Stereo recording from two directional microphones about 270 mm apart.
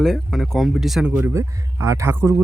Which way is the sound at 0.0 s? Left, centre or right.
Centre.